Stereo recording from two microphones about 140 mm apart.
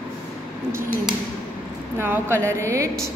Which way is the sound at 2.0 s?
15° right (ahead or behind).